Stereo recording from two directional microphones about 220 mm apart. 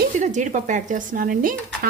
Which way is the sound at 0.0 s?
35° right (ahead or behind).